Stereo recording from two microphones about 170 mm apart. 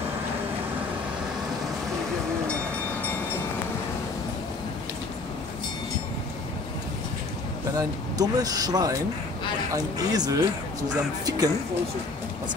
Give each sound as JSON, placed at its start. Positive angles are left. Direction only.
{"t": 7.7, "sound": "speech", "side_deg": -20}